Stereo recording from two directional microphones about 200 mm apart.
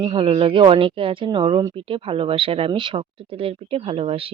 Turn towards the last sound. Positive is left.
turn(degrees=-30)  # may be behind; listen again after turning